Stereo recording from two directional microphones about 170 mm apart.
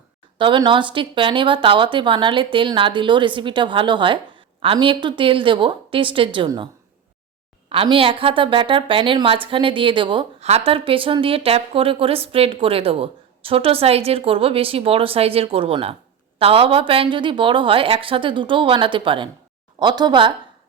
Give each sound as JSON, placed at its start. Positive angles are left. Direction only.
{"t": 0.3, "sound": "speech", "side_deg": -30}
{"t": 7.7, "sound": "a woman's voice", "side_deg": -30}